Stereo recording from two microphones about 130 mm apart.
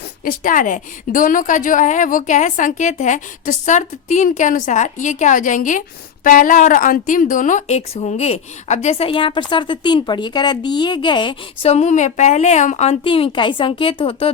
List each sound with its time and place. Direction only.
0.3 s a woman's voice: 90° left
6.2 s speech: 90° left; by 11.3 s 35° left (ahead or behind)
11.6 s a woman's voice: 60° left (ahead or behind)
13.1 s speech: 45° left (ahead or behind)